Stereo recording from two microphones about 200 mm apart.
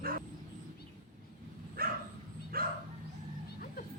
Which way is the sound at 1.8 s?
45° right (ahead or behind).